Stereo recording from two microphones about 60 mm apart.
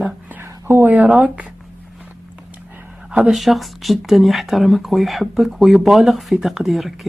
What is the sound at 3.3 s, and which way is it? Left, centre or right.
Speech, centre.